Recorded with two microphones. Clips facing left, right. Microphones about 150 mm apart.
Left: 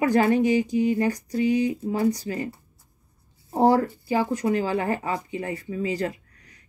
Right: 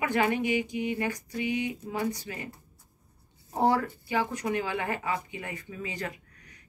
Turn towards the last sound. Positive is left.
turn(degrees=35)  # may be behind; listen again after turning